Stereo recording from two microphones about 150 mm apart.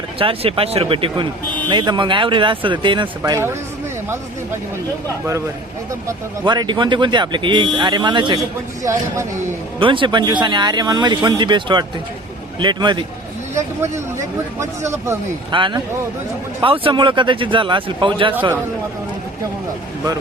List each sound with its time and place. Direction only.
0.2 s speech: 40° right (ahead or behind)
6.1 s speech: 30° right (ahead or behind)
8.8 s speech: 20° right (ahead or behind)
9.8 s speech: 35° right (ahead or behind)
13.5 s speech: 20° right (ahead or behind)
15.5 s speech: 35° right (ahead or behind)